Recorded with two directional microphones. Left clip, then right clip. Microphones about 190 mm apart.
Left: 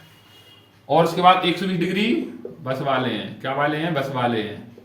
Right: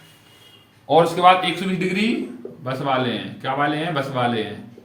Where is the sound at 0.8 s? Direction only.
20° right (ahead or behind).